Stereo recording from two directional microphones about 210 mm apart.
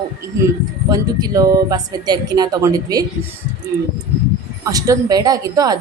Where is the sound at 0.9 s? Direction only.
20° right (ahead or behind).